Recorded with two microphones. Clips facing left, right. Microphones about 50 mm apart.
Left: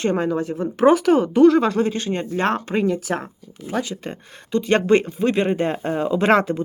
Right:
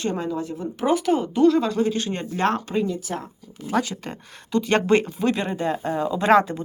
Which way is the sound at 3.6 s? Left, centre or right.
Centre.